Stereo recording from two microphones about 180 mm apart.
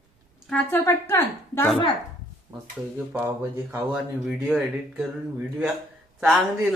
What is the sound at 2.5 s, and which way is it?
Speech, 25° right (ahead or behind).